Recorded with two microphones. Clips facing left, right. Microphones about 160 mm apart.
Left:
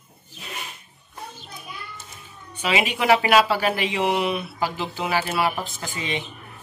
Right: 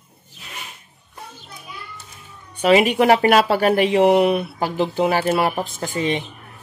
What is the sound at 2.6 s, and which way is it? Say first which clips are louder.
Speech: right 9 dB; 50° right (ahead or behind).